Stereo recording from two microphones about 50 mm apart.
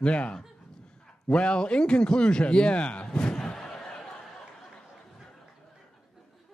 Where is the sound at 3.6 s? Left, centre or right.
Centre.